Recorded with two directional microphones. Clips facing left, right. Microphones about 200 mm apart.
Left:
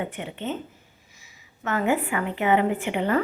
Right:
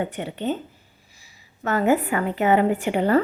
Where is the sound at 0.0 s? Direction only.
35° right (ahead or behind).